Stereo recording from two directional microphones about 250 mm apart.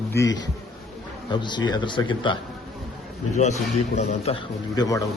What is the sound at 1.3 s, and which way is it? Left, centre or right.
A man's voice, centre.